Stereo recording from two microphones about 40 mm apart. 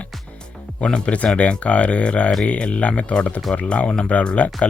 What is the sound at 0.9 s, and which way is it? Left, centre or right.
Speech, left.